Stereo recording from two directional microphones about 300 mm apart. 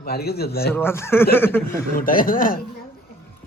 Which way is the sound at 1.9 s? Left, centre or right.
Left.